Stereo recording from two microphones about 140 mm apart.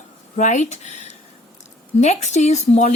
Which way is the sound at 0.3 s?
60° left (ahead or behind).